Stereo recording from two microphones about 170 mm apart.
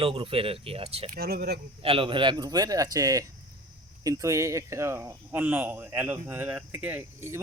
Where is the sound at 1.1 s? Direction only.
65° right (ahead or behind).